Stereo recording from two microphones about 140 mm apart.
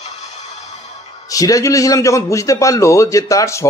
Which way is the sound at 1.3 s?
25° left (ahead or behind).